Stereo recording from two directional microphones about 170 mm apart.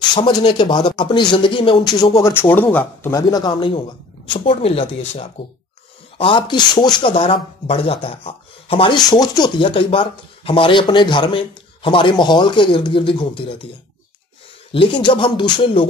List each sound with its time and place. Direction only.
0.1 s speech: 25° left (ahead or behind)
14.7 s speech: 30° left (ahead or behind)